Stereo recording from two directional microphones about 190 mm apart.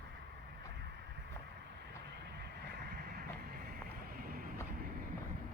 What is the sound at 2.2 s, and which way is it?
Vehicle, 60° right (ahead or behind).